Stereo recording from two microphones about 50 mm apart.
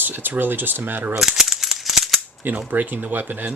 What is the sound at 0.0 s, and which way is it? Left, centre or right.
Speech, right.